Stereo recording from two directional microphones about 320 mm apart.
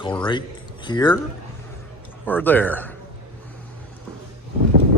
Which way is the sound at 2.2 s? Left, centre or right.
Centre.